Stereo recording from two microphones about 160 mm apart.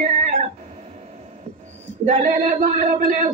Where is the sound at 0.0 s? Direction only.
45° right (ahead or behind).